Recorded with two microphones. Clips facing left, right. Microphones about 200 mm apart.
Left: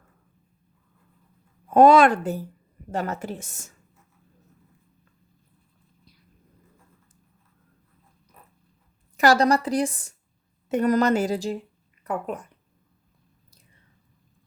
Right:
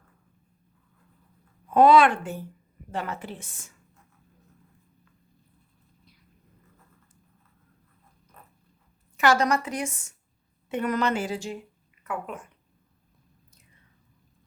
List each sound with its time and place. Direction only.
1.7 s a woman's voice: 45° left (ahead or behind)
9.1 s a woman's voice: 35° left (ahead or behind)